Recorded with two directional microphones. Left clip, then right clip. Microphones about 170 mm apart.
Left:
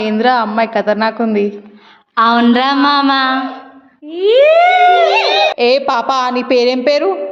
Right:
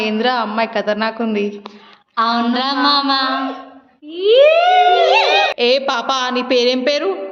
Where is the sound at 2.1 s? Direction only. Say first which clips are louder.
Left 6 dB; 60° left (ahead or behind).